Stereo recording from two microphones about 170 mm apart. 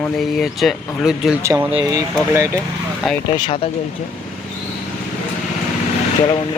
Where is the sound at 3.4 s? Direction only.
35° left (ahead or behind).